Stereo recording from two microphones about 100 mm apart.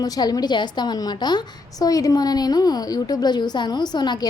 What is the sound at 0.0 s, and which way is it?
A woman's voice, 40° left (ahead or behind).